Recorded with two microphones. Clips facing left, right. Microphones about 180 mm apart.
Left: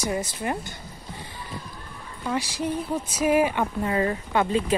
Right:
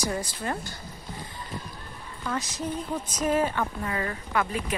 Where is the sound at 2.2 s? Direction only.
10° left (ahead or behind).